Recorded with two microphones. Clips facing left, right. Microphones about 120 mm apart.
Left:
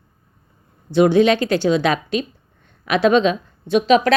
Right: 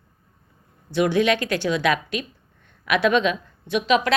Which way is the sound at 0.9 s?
30° left (ahead or behind).